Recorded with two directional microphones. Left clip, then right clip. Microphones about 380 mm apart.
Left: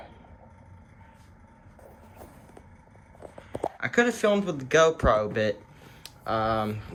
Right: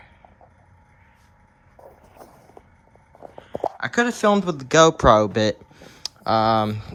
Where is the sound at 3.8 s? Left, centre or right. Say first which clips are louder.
Right 3 dB; centre.